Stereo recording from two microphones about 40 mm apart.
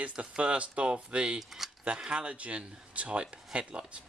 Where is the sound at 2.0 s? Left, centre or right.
Right.